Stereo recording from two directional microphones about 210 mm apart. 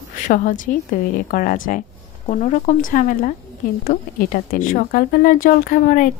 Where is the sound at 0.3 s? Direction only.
40° left (ahead or behind).